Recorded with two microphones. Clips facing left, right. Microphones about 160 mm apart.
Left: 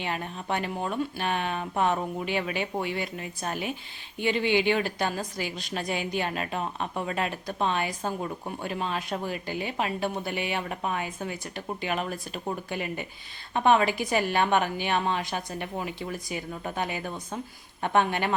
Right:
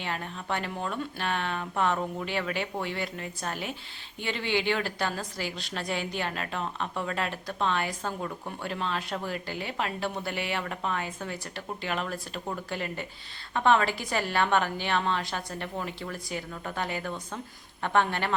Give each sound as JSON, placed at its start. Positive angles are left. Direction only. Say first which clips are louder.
{"t": 0.0, "sound": "a woman's voice", "louder": "left 2 dB", "side_deg": 15}